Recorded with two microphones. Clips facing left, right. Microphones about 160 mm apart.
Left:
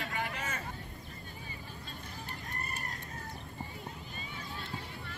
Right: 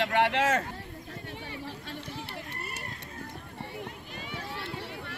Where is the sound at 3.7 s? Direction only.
75° right (ahead or behind).